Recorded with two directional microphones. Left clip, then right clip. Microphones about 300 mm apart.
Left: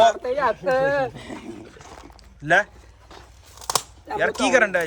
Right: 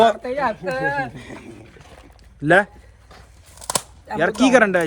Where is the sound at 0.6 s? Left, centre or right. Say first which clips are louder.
Left 2 dB; centre.